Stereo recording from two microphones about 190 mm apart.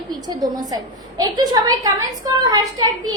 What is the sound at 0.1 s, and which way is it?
A woman's voice, 20° right (ahead or behind).